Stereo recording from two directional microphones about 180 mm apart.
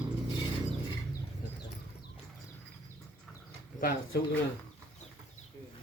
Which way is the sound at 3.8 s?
55° left (ahead or behind).